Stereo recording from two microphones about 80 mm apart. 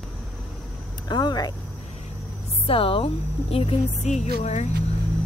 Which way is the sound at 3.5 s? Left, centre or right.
Left.